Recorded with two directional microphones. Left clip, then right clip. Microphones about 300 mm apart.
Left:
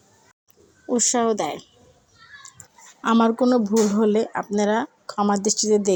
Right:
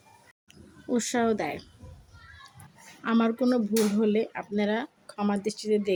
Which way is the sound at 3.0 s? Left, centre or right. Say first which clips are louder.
Left 7 dB; centre.